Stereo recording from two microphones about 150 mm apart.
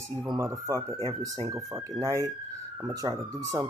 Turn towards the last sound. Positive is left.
turn(degrees=-20)  # may be behind; listen again after turning